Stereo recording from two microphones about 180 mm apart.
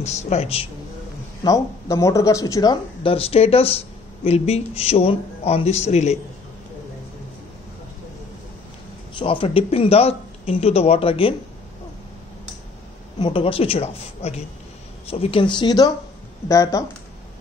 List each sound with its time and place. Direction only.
0.0 s speech: 35° left (ahead or behind)
1.4 s speech: 15° left (ahead or behind); by 6.1 s 40° left (ahead or behind)
9.2 s speech: 30° left (ahead or behind)
13.2 s speech: 30° left (ahead or behind)